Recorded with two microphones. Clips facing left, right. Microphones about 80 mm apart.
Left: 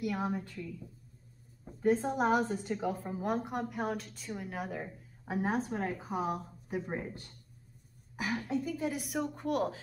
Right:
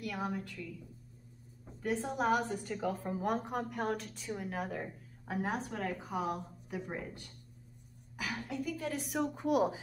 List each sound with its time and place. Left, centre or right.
0.0 s a woman's voice: left
1.8 s a woman's voice: left
3.0 s a woman's voice: centre
5.3 s a woman's voice: left
8.5 s a woman's voice: left
9.0 s a woman's voice: centre